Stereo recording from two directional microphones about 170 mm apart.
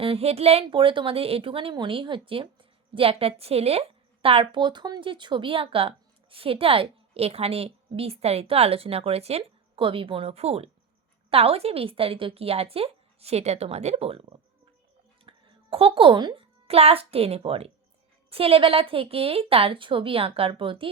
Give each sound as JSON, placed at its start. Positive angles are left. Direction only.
{"t": 0.0, "sound": "a woman's voice", "side_deg": -35}